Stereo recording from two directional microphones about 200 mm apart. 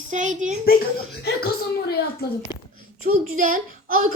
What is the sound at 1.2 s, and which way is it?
Speech, 50° left (ahead or behind).